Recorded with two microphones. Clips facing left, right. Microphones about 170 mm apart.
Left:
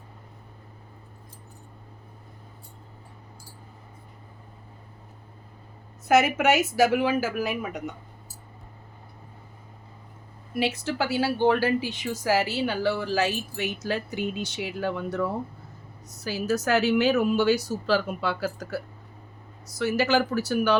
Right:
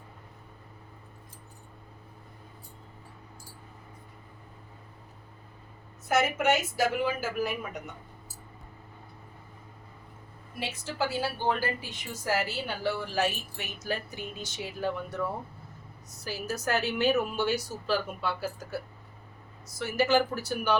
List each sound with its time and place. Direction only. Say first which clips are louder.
6.1 s speech: left 5 dB; 90° left
10.6 s speech: left 6 dB; 75° left (ahead or behind)
16.2 s a woman's voice: left 7 dB; 85° left
19.6 s speech: left 3 dB; 75° left (ahead or behind)